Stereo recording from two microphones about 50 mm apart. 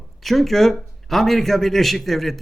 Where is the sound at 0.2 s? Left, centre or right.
Centre.